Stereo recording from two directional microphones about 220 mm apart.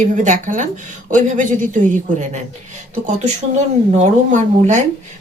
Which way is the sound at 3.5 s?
35° right (ahead or behind).